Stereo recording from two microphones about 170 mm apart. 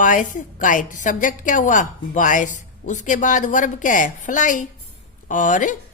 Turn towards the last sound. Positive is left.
turn(degrees=50)  # may be behind; listen again after turning